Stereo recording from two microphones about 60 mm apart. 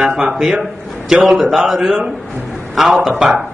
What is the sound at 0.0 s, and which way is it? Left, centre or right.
Speech, right.